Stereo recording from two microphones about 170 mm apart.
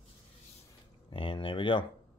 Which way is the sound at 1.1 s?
30° left (ahead or behind).